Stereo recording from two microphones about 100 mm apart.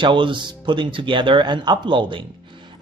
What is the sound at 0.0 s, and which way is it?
Speech, 55° right (ahead or behind).